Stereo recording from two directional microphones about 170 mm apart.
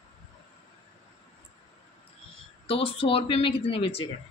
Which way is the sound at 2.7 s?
35° left (ahead or behind).